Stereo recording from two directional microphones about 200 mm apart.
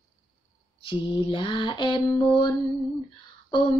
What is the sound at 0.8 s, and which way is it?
Speech, 25° left (ahead or behind).